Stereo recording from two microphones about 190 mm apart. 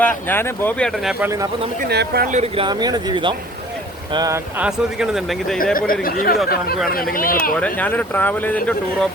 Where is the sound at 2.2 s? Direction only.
35° right (ahead or behind); by 4.4 s 20° right (ahead or behind).